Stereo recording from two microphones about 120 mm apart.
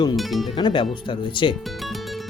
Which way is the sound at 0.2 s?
Centre (ahead or behind).